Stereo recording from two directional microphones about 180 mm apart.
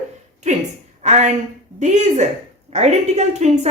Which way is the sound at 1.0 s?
40° right (ahead or behind).